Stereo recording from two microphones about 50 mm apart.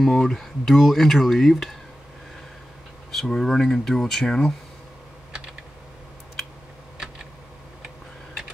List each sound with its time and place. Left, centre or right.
0.0 s speech: centre
3.1 s speech: centre